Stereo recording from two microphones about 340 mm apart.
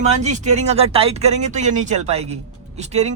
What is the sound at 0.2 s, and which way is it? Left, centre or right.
Speech, centre.